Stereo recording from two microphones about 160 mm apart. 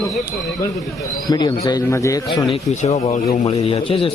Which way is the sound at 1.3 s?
25° left (ahead or behind).